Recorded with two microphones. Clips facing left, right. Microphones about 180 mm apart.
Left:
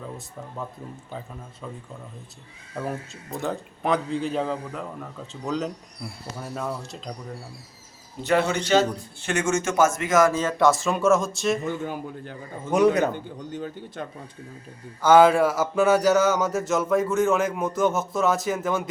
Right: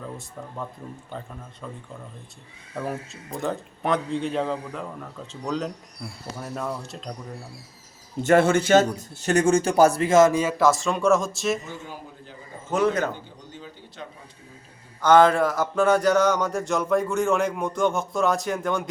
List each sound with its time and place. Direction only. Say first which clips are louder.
1.1 s a man's voice: even; centre (ahead or behind)
8.2 s speech: right 4 dB; 45° right (ahead or behind)
9.0 s speech: right 5 dB; 40° right (ahead or behind)
10.6 s a man's voice: left 2 dB; centre (ahead or behind)
11.6 s a man's voice: left 9 dB; 60° left (ahead or behind)
12.7 s speech: left 3 dB; 15° left (ahead or behind)
13.1 s speech: left 9 dB; 55° left (ahead or behind)
15.0 s a man's voice: left 1 dB; 5° left (ahead or behind)